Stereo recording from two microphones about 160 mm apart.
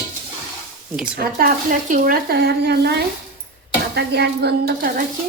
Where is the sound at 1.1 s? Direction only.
70° right (ahead or behind).